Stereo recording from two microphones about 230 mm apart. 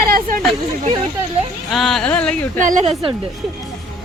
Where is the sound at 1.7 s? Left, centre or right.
Centre.